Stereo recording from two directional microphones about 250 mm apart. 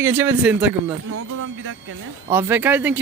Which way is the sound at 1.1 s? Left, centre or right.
Right.